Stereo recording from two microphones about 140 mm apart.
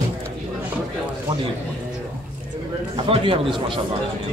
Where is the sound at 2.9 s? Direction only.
40° right (ahead or behind).